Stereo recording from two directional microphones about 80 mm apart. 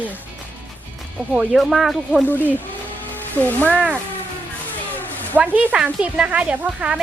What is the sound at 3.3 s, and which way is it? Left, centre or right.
Speech, centre.